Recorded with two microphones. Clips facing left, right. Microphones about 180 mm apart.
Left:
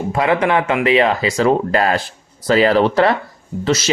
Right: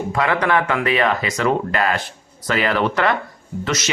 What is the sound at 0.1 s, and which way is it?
Speech, 25° left (ahead or behind).